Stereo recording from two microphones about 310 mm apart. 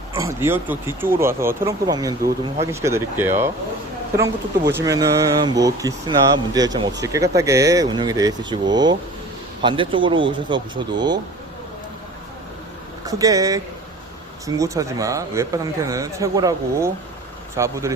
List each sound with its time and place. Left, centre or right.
0.2 s speech: centre
13.1 s speech: centre